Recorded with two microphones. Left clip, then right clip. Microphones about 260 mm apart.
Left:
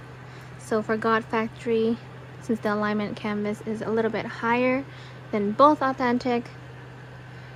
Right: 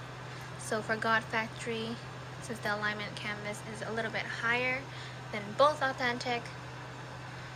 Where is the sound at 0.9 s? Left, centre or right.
Centre.